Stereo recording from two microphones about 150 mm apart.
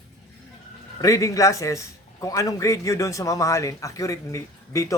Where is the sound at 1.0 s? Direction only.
20° left (ahead or behind).